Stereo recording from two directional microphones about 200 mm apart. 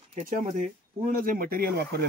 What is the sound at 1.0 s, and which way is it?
Speech, 45° right (ahead or behind).